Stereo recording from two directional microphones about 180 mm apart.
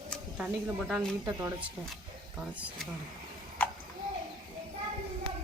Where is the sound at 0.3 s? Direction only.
5° right (ahead or behind).